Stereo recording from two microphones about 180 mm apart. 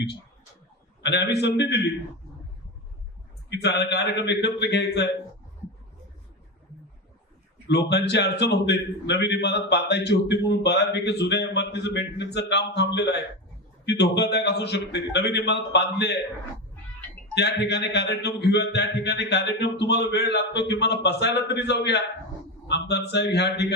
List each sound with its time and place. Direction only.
1.0 s a man's voice: 70° left (ahead or behind)
3.5 s a man's voice: 70° left (ahead or behind)
7.7 s a man's voice: 70° left (ahead or behind)
17.3 s a man's voice: 70° left (ahead or behind)